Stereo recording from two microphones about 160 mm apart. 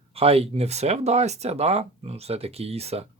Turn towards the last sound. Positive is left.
turn(degrees=-40)  # may be behind; listen again after turning